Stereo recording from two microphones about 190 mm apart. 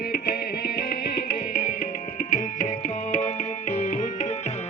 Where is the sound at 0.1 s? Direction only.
55° left (ahead or behind).